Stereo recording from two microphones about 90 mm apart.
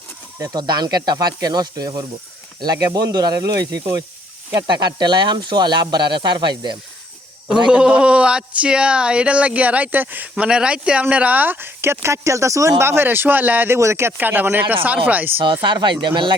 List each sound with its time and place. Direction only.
0.3 s speech: 45° right (ahead or behind)
4.6 s speech: 55° right (ahead or behind)
7.7 s speech: 10° right (ahead or behind)
13.7 s speech: 30° right (ahead or behind)
15.6 s speech: 55° right (ahead or behind)